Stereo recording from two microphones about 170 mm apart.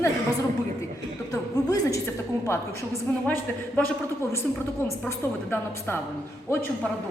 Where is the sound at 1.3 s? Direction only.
20° left (ahead or behind).